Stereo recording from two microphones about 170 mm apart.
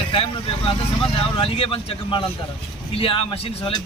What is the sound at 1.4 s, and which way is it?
A man's voice, 30° left (ahead or behind).